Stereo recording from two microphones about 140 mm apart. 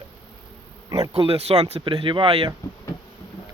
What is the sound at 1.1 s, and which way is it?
Speech, 45° right (ahead or behind).